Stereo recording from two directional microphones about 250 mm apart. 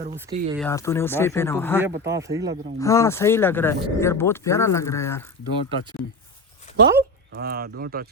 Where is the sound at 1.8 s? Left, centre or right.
Centre.